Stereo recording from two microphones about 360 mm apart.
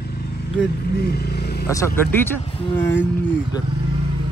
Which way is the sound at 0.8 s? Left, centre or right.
Left.